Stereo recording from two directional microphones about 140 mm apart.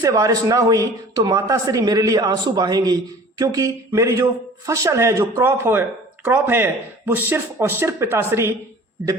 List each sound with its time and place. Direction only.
0.0 s a man's voice: 25° right (ahead or behind)